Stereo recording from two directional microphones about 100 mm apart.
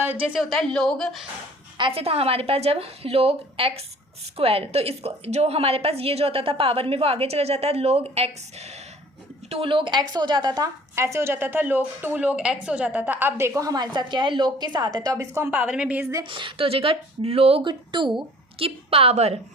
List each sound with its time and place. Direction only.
0.0 s a woman's voice: 20° right (ahead or behind)
0.3 s a woman's voice: centre (ahead or behind)
1.9 s a woman's voice: 75° right (ahead or behind); by 8.8 s 90° right
9.5 s a woman's voice: 65° right (ahead or behind); by 10.7 s 45° right (ahead or behind)
10.9 s a woman's voice: 30° right (ahead or behind)
15.4 s a woman's voice: 20° right (ahead or behind)
16.2 s a woman's voice: 60° right (ahead or behind); by 17.6 s 85° right
17.6 s a woman's voice: 50° right (ahead or behind)
18.6 s a woman's voice: 70° right (ahead or behind); by 19.4 s 90° right